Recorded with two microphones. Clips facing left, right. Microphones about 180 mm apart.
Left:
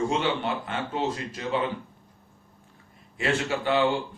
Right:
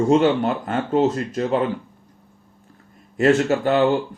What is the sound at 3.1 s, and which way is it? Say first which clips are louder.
Speech: right 10 dB; 45° right (ahead or behind).